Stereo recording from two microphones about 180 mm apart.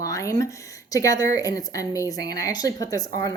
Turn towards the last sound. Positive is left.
turn(degrees=20)  # may be behind; listen again after turning